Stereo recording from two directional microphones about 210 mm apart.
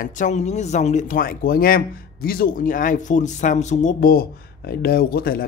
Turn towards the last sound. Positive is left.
turn(degrees=45)  # may be behind; listen again after turning